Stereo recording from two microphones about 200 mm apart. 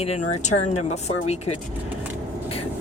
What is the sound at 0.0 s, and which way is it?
Speech, 35° left (ahead or behind).